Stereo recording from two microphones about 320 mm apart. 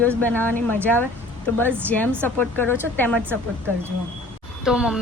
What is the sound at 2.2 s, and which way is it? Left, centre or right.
Speech, centre.